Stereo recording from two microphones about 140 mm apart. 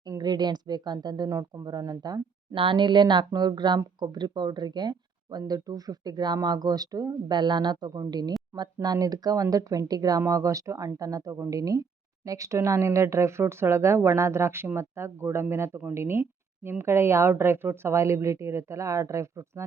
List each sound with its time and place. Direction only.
0.0 s speech: 30° right (ahead or behind)